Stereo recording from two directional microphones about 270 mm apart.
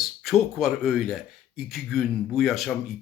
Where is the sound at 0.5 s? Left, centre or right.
Centre.